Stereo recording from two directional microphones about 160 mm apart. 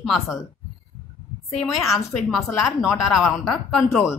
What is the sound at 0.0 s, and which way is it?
Speech, centre (ahead or behind).